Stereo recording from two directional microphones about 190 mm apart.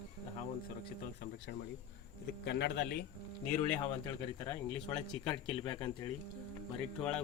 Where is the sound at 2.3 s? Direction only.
65° left (ahead or behind).